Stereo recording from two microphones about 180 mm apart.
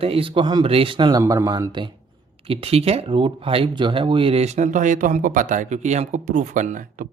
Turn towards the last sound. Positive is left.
turn(degrees=-45)  # may be behind; listen again after turning